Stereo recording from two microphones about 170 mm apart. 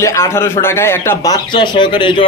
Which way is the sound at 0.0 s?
15° left (ahead or behind).